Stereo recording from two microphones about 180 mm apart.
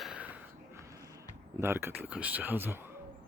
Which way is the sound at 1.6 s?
15° right (ahead or behind).